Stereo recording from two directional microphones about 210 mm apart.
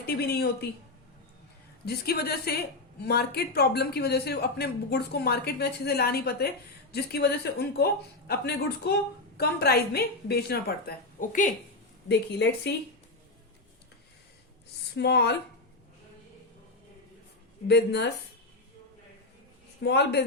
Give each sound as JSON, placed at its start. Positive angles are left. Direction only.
{"t": 0.0, "sound": "a woman's voice", "side_deg": 50}
{"t": 1.8, "sound": "a woman's voice", "side_deg": 50}
{"t": 12.0, "sound": "a woman's voice", "side_deg": 55}
{"t": 14.9, "sound": "a woman's voice", "side_deg": 55}
{"t": 17.7, "sound": "a woman's voice", "side_deg": 55}
{"t": 19.8, "sound": "a woman's voice", "side_deg": 50}